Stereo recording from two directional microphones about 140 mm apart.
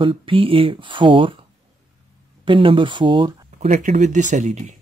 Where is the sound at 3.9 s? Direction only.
60° right (ahead or behind).